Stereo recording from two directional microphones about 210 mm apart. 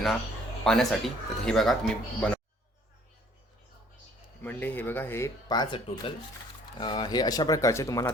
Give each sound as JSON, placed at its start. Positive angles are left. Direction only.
{"t": 0.6, "sound": "speech", "side_deg": 0}
{"t": 4.4, "sound": "speech", "side_deg": 10}